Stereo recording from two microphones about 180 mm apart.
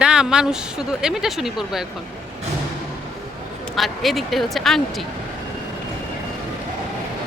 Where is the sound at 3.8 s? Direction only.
Centre (ahead or behind).